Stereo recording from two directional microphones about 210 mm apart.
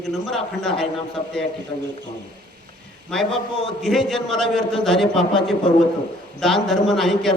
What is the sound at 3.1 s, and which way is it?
A man's voice, centre (ahead or behind).